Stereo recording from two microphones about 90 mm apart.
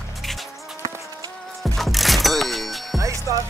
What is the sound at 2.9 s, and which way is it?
Music, 35° right (ahead or behind).